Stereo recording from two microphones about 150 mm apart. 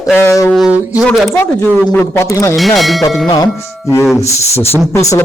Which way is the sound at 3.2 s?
25° left (ahead or behind).